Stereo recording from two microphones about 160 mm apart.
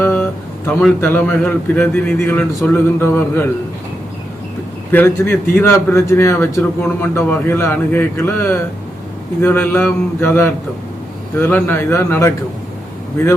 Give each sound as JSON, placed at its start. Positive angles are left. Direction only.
{"t": 0.0, "sound": "a sound", "side_deg": 10}
{"t": 0.7, "sound": "a man's voice", "side_deg": 5}
{"t": 4.9, "sound": "a man's voice", "side_deg": 15}